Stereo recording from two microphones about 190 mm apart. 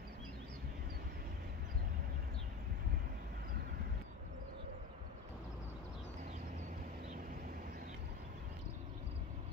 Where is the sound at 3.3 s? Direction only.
50° right (ahead or behind).